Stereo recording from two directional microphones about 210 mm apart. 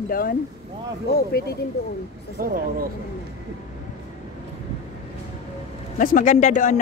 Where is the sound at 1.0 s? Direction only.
50° left (ahead or behind).